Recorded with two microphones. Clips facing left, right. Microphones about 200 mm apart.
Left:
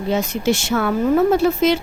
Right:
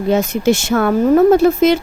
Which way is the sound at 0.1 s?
45° right (ahead or behind).